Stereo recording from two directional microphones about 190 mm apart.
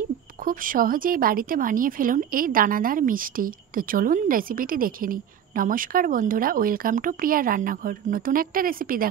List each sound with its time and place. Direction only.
0.5 s speech: 45° right (ahead or behind)